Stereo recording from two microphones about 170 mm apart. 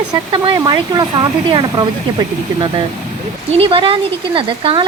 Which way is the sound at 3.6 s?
30° right (ahead or behind).